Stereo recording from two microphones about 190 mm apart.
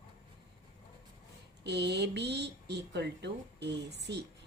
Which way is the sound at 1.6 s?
60° right (ahead or behind).